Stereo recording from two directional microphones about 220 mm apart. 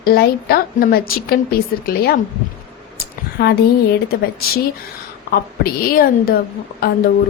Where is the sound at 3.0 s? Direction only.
45° left (ahead or behind).